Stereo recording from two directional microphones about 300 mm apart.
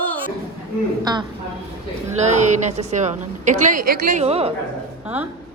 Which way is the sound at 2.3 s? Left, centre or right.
Right.